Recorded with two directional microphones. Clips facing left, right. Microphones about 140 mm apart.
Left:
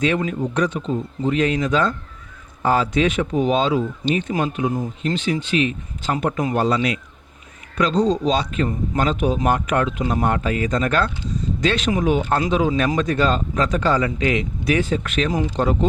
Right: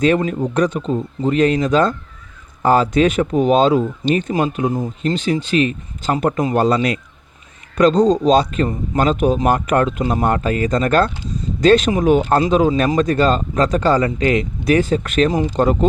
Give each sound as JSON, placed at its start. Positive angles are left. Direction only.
{"t": 0.0, "sound": "speech", "side_deg": -40}